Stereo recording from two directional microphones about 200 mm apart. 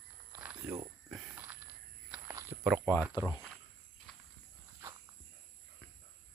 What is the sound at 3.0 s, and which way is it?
Speech, 10° right (ahead or behind).